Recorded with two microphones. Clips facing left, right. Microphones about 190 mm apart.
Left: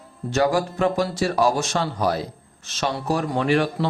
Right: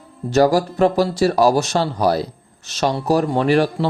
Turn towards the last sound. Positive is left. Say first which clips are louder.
# right 5 dB
turn(degrees=-35)  # may be behind; listen again after turning